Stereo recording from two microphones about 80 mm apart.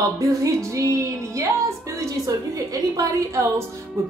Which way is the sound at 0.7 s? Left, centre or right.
Right.